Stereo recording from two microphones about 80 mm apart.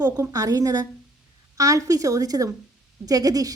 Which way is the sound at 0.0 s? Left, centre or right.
Right.